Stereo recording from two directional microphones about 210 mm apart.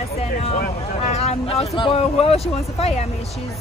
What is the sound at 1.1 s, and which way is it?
Speech, 30° left (ahead or behind).